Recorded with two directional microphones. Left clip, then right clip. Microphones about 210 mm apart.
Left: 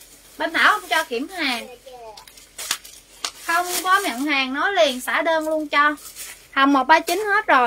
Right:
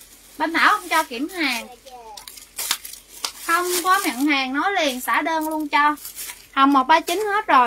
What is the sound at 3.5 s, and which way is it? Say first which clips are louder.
Speech: right 1 dB; centre (ahead or behind).